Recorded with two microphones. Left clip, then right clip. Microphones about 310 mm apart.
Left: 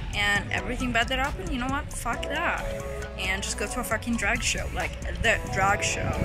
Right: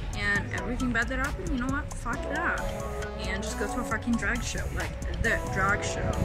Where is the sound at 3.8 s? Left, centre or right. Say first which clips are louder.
Left 5 dB; centre.